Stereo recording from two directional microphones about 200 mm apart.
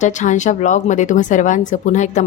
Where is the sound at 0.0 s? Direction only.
40° left (ahead or behind).